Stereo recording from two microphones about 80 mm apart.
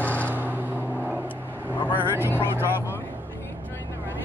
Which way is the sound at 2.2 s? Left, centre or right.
Left.